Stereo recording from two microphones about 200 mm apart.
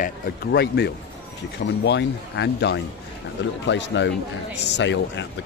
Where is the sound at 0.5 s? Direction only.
55° left (ahead or behind).